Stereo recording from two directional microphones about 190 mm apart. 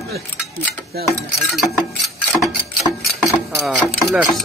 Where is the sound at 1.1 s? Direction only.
5° right (ahead or behind).